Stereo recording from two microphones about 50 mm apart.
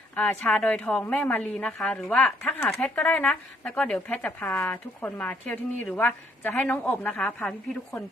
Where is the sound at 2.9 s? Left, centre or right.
Left.